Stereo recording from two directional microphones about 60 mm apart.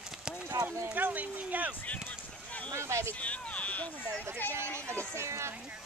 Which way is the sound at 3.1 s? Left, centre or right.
Left.